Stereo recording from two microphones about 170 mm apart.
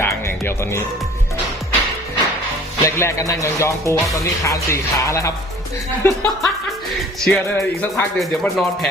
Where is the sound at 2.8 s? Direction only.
15° left (ahead or behind).